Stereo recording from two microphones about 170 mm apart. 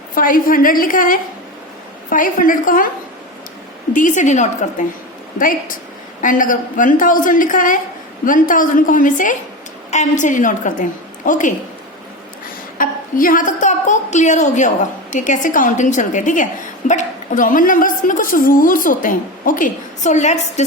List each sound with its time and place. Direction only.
0.1 s a woman's voice: 55° left (ahead or behind)
3.9 s a woman's voice: 45° left (ahead or behind)
12.7 s a woman's voice: 55° left (ahead or behind)